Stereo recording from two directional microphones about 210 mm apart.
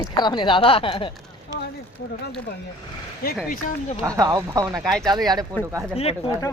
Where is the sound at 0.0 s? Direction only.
20° left (ahead or behind).